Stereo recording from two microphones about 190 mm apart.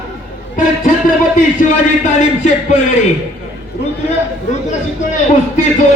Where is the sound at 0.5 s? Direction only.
45° left (ahead or behind).